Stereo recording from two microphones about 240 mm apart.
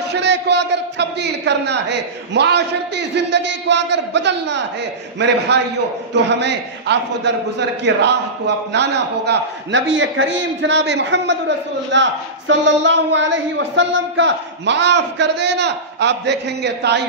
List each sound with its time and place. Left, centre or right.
0.1 s a man's voice: right